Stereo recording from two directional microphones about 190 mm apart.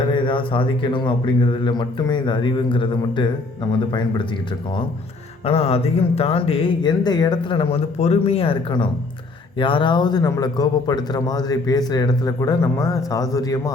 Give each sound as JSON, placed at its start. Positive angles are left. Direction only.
{"t": 0.1, "sound": "a man's voice", "side_deg": 25}
{"t": 5.5, "sound": "a man's voice", "side_deg": 30}